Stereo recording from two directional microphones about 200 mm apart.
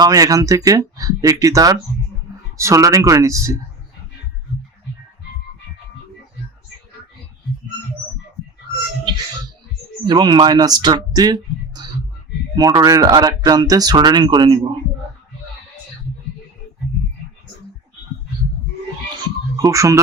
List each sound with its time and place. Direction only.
0.0 s speech: 15° right (ahead or behind)
10.0 s speech: 20° right (ahead or behind)
19.6 s speech: 15° right (ahead or behind)